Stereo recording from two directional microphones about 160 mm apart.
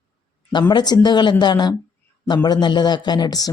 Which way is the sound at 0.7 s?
30° left (ahead or behind).